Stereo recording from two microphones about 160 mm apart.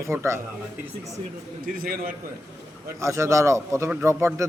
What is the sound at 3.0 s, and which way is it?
A man's voice, 20° right (ahead or behind).